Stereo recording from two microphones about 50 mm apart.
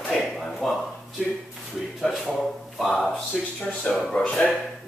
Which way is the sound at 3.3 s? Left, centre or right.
Centre.